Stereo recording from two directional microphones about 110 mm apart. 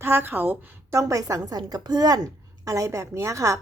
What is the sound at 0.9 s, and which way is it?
A woman's voice, 30° right (ahead or behind).